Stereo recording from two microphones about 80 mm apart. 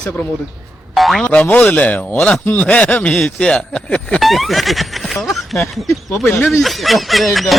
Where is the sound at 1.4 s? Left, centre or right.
Centre.